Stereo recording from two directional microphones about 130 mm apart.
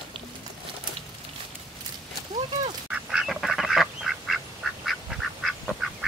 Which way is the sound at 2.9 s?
5° right (ahead or behind).